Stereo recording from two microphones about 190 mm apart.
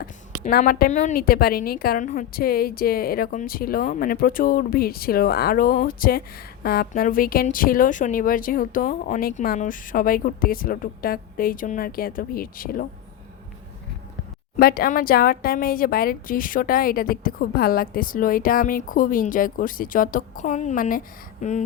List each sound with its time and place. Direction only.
0.0 s a woman's voice: 45° left (ahead or behind)
14.5 s a woman's voice: 50° left (ahead or behind)